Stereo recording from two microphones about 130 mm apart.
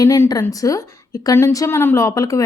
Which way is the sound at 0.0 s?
25° left (ahead or behind).